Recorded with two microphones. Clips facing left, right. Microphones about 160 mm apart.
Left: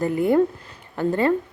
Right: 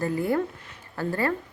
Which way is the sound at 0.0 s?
20° left (ahead or behind).